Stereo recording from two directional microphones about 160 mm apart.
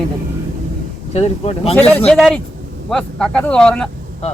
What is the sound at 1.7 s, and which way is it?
Speech, 5° left (ahead or behind).